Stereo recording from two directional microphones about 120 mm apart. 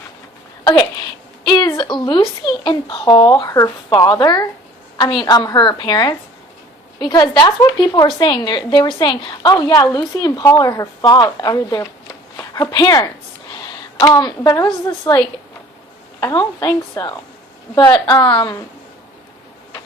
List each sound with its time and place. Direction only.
0.6 s a woman's voice: 35° left (ahead or behind)
13.5 s a sound: 40° left (ahead or behind)
14.0 s a woman's voice: 35° left (ahead or behind)
16.6 s a woman's voice: 25° left (ahead or behind); by 18.5 s 45° left (ahead or behind)